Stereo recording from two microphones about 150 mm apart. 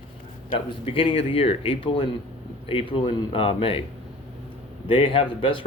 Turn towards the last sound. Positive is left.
turn(degrees=35)  # may be behind; listen again after turning